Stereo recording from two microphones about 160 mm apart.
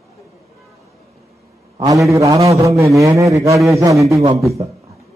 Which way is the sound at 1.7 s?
20° right (ahead or behind).